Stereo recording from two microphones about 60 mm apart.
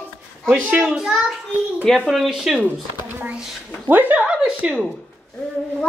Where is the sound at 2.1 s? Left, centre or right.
Centre.